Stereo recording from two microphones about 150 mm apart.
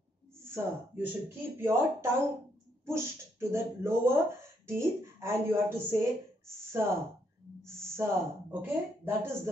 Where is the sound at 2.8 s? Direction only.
20° right (ahead or behind).